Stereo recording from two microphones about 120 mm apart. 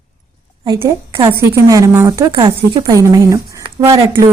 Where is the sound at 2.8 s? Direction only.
30° right (ahead or behind).